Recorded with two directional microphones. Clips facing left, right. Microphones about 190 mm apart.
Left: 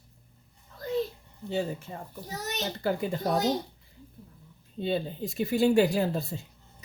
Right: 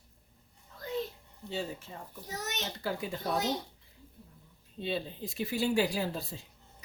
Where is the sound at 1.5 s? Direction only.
50° left (ahead or behind).